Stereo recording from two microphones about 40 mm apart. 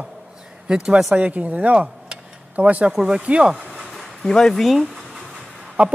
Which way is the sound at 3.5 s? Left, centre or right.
Centre.